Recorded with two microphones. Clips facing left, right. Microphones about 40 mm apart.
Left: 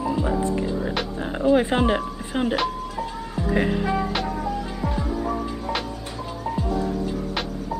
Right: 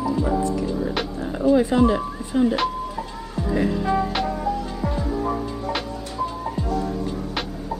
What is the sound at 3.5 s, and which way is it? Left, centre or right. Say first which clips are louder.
Music: even; left.